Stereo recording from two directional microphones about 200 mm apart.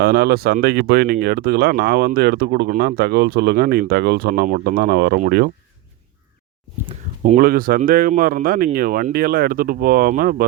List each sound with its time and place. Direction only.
0.0 s speech: 50° right (ahead or behind)
7.3 s speech: 45° right (ahead or behind)